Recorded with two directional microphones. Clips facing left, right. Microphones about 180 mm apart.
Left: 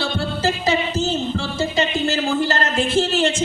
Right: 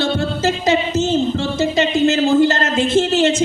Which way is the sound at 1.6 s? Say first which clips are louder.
Right 5 dB; 20° right (ahead or behind).